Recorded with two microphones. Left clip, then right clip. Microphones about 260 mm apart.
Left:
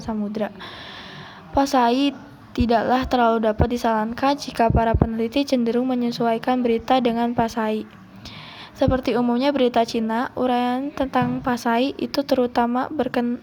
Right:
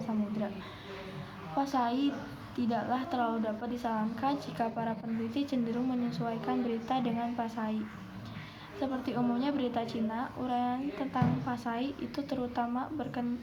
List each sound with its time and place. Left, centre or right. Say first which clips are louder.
0.0 s a woman's voice: left 9 dB; left
1.5 s a woman's voice: left 13 dB; left
8.8 s a woman's voice: left 14 dB; left